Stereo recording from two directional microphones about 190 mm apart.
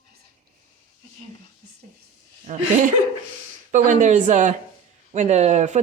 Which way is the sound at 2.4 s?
40° right (ahead or behind).